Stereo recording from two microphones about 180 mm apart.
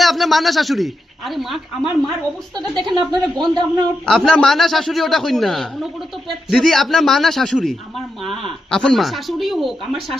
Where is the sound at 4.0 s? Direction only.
5° left (ahead or behind).